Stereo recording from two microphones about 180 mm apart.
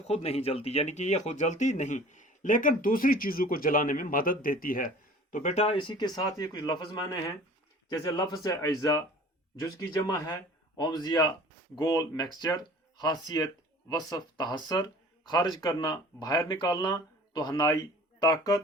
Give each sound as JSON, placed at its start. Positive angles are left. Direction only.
{"t": 0.1, "sound": "speech", "side_deg": 35}
{"t": 5.3, "sound": "speech", "side_deg": 40}